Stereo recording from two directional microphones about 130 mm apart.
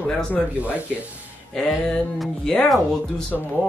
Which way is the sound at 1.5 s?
5° left (ahead or behind).